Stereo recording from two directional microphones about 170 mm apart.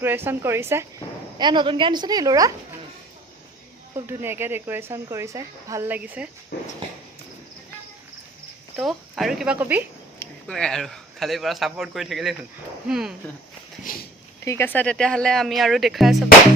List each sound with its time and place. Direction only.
0.0 s speech: 10° right (ahead or behind)
1.4 s a woman's voice: 25° right (ahead or behind)
3.9 s speech: 15° right (ahead or behind)
6.5 s dog: 70° left (ahead or behind)
8.7 s speech: centre (ahead or behind)
10.2 s a man's voice: 5° left (ahead or behind)
14.4 s speech: 15° left (ahead or behind); by 16.1 s centre (ahead or behind)